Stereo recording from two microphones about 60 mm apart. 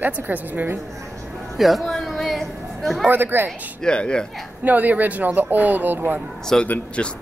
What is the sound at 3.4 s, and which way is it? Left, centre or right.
Speech, centre.